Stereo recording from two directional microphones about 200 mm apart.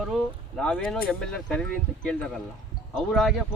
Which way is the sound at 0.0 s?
Centre (ahead or behind).